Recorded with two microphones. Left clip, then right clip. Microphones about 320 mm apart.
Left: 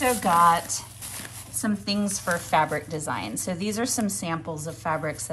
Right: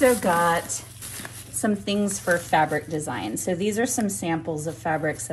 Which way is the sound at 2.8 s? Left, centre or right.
Left.